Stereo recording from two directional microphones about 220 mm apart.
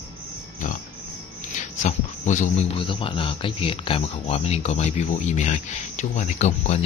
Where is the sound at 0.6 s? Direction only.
35° left (ahead or behind).